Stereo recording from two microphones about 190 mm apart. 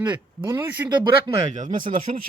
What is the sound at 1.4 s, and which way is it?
Speech, 40° right (ahead or behind).